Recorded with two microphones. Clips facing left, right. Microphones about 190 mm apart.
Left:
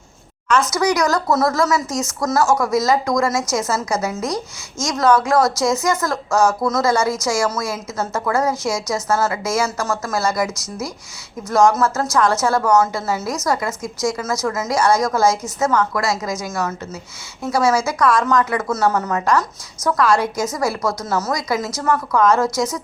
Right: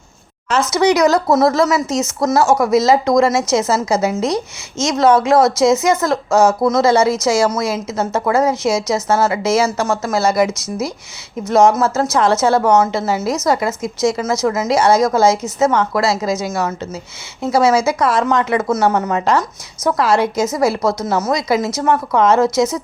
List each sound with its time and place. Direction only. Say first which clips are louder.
0.7 s speech: right 5 dB; 25° right (ahead or behind)